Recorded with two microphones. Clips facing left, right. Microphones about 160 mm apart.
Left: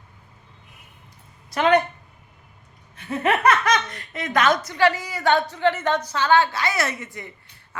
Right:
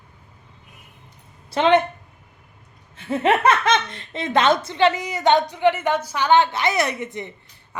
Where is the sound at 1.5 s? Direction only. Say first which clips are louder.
Right 2 dB; 25° right (ahead or behind).